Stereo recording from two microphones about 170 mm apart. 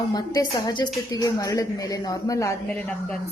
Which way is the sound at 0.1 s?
25° left (ahead or behind).